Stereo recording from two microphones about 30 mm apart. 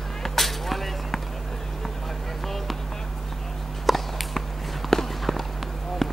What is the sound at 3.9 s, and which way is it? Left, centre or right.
Walk, centre.